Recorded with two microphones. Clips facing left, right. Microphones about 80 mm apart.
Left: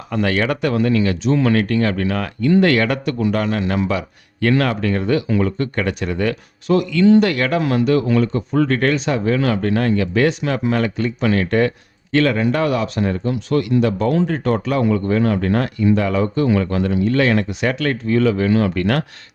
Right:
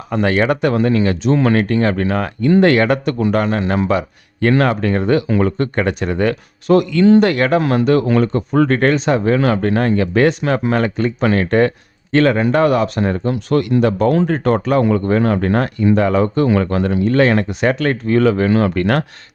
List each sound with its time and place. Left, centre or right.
0.1 s speech: right